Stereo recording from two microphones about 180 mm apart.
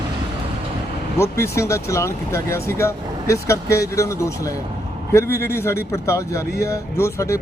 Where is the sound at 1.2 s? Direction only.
15° left (ahead or behind).